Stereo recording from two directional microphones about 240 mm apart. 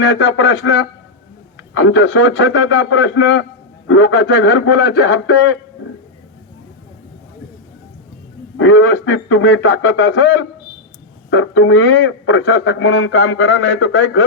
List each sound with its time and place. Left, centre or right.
0.0 s a man's voice: left
8.5 s a man's voice: left